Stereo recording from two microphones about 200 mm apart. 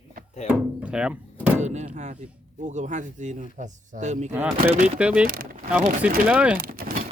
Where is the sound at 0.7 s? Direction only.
5° right (ahead or behind).